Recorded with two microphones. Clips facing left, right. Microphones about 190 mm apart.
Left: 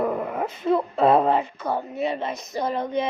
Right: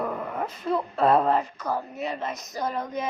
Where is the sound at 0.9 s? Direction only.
5° left (ahead or behind).